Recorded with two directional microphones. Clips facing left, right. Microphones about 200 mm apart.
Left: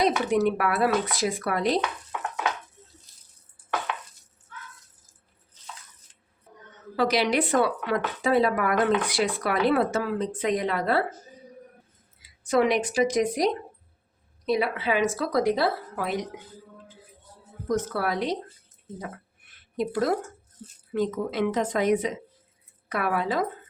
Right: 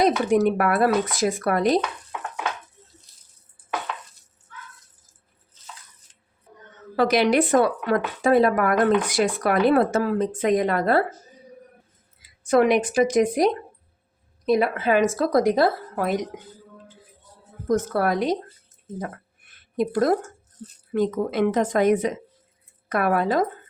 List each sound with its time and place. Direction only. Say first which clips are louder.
0.0 s speech: right 4 dB; 45° right (ahead or behind)
6.9 s speech: right 5 dB; 50° right (ahead or behind)
12.5 s speech: right 4 dB; 55° right (ahead or behind)
17.7 s speech: right 5 dB; 45° right (ahead or behind)
19.7 s speech: right 4 dB; 50° right (ahead or behind)